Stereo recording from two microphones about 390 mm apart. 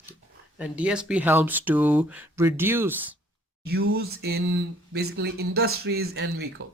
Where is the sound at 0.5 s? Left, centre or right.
Centre.